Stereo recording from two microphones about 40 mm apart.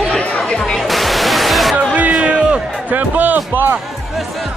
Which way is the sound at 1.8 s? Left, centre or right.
Right.